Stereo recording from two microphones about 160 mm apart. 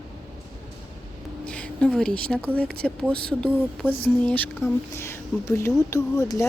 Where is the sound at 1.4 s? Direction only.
5° left (ahead or behind).